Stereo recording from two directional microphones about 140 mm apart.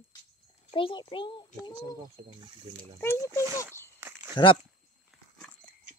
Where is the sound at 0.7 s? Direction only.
35° left (ahead or behind).